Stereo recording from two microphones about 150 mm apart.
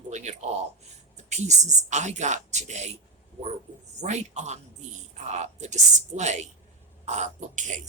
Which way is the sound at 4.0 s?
50° right (ahead or behind).